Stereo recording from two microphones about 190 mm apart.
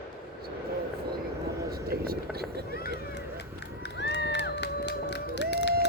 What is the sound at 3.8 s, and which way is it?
Crowd, 65° left (ahead or behind).